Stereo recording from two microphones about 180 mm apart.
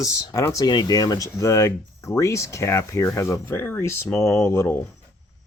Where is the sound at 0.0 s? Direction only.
20° left (ahead or behind).